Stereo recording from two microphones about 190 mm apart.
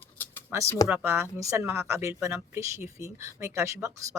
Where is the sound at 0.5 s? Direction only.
15° right (ahead or behind).